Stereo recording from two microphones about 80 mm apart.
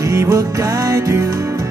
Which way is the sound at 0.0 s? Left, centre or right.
Right.